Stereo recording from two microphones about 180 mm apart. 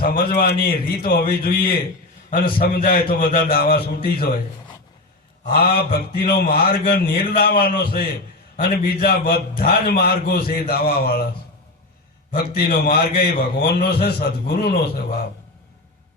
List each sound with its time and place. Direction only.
0.0 s a man's voice: 55° left (ahead or behind)
5.5 s a man's voice: 60° left (ahead or behind)
12.3 s a man's voice: 55° left (ahead or behind)